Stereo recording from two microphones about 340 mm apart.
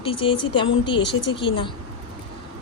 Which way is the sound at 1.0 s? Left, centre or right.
Left.